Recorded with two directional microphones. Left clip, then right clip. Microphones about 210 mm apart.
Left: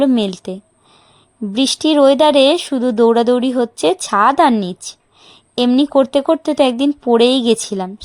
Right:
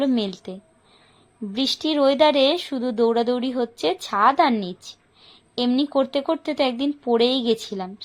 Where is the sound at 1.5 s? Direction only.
40° left (ahead or behind).